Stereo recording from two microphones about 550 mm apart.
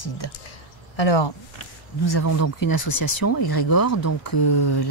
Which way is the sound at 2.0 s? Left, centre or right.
Left.